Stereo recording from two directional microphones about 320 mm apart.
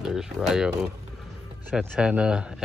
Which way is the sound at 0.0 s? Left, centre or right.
Centre.